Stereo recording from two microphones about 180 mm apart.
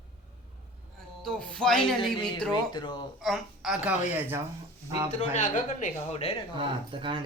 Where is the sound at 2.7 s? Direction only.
25° left (ahead or behind).